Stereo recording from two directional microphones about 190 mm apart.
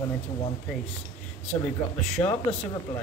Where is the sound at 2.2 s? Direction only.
20° left (ahead or behind).